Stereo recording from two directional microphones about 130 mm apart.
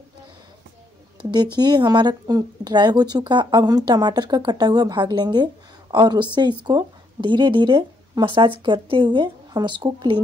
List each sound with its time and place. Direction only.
1.3 s speech: 35° right (ahead or behind)